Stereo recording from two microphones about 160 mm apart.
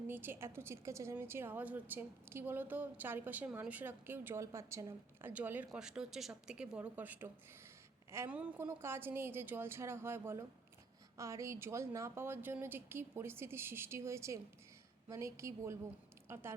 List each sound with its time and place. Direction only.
0.1 s a woman's voice: 15° right (ahead or behind)